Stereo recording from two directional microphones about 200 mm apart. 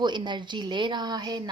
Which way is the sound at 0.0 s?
20° right (ahead or behind).